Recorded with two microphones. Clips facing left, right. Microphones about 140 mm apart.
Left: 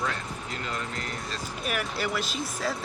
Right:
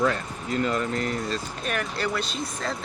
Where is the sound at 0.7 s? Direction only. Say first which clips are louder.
Right 8 dB; 40° right (ahead or behind).